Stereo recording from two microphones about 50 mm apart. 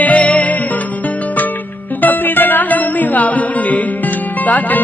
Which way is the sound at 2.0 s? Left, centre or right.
Left.